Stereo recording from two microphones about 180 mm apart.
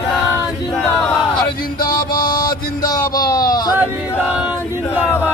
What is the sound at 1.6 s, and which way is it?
Music, 25° left (ahead or behind).